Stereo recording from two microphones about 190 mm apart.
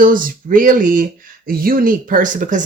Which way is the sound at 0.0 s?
45° right (ahead or behind).